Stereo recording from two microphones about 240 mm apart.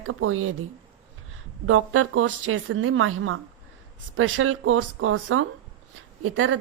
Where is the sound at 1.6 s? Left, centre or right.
Right.